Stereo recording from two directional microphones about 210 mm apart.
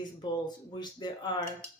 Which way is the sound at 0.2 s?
20° left (ahead or behind).